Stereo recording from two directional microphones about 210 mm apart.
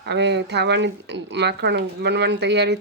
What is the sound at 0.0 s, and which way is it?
Speech, 55° right (ahead or behind).